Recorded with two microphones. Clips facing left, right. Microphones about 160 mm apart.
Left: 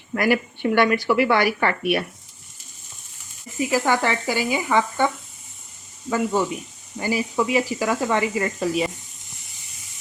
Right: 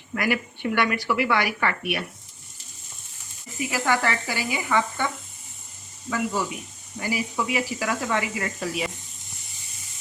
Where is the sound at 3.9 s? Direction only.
30° left (ahead or behind).